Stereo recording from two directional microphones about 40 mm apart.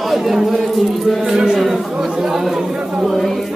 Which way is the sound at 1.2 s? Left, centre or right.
Centre.